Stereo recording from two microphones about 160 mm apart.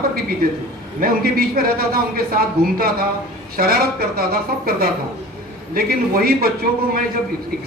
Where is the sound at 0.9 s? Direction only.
65° right (ahead or behind).